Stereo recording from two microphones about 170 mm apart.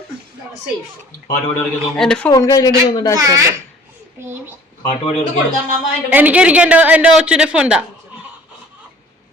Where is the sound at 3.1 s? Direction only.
20° right (ahead or behind).